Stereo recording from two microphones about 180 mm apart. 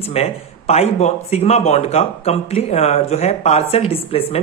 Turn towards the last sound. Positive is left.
turn(degrees=35)  # may be behind; listen again after turning